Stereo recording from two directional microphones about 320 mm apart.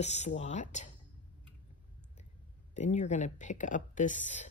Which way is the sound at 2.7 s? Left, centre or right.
Left.